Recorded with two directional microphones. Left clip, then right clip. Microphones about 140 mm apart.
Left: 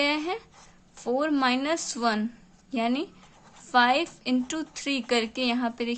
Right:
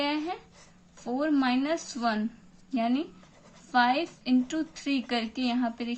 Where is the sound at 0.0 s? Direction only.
50° left (ahead or behind).